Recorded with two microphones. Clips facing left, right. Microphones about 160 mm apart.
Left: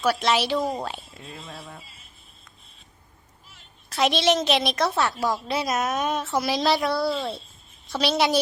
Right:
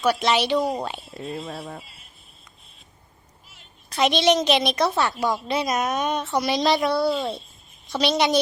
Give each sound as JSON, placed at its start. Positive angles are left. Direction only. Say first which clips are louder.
{"t": 0.0, "sound": "a woman's voice", "louder": "right 1 dB", "side_deg": 0}
{"t": 1.2, "sound": "speech", "louder": "right 8 dB", "side_deg": -40}
{"t": 3.8, "sound": "a woman's voice", "louder": "right 2 dB", "side_deg": 0}